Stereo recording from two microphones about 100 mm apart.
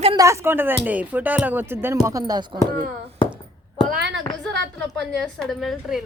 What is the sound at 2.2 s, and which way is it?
Speech, 50° right (ahead or behind).